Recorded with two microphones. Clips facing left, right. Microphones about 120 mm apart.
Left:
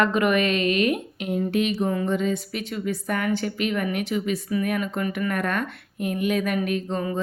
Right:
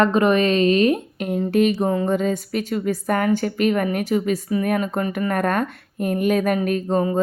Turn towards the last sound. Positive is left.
turn(degrees=-40)  # may be behind; listen again after turning